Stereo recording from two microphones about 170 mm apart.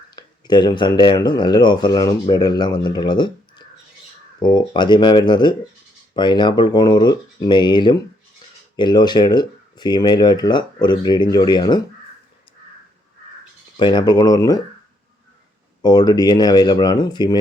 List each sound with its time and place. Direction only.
0.2 s speech: 25° left (ahead or behind)
13.7 s speech: 25° left (ahead or behind)
15.8 s speech: 25° left (ahead or behind)